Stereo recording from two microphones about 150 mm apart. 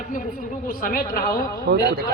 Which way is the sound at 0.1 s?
65° left (ahead or behind).